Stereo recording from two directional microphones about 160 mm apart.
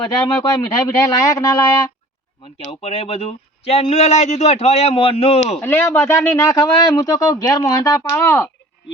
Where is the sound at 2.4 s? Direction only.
35° left (ahead or behind).